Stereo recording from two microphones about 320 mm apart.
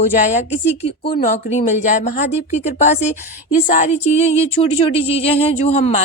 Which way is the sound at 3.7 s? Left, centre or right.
Left.